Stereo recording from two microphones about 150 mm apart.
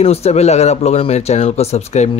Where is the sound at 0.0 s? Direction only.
45° left (ahead or behind).